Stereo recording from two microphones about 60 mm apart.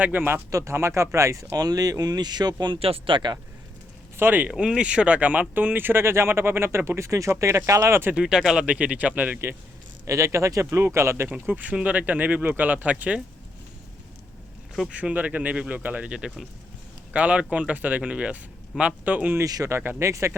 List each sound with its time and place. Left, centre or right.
0.0 s speech: right
0.5 s speech: right
2.4 s speech: right
4.2 s speech: right
4.5 s speech: centre; by 7.9 s right
8.1 s speech: centre
8.6 s speech: right
10.1 s speech: right
11.3 s speech: right
14.8 s speech: right
19.5 s speech: right
19.7 s speech: right
20.0 s speech: right